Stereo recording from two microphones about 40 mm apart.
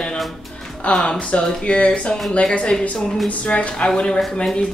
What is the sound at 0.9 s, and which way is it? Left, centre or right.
Speech, left.